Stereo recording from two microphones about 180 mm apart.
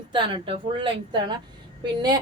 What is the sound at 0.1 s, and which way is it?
A woman's voice, 25° right (ahead or behind).